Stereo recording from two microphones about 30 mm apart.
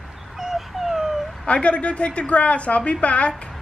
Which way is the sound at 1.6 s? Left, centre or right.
Left.